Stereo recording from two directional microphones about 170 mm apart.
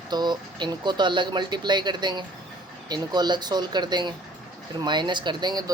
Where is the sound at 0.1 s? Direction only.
25° right (ahead or behind).